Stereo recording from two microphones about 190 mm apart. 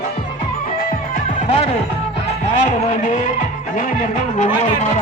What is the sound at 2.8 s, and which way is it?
Music, 45° left (ahead or behind).